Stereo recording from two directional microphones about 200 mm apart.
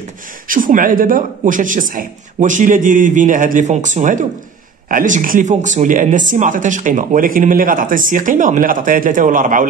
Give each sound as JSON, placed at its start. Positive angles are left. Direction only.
{"t": 0.5, "sound": "a man's voice", "side_deg": -45}